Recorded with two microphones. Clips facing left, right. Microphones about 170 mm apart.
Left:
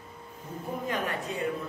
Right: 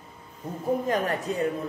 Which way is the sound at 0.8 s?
40° right (ahead or behind).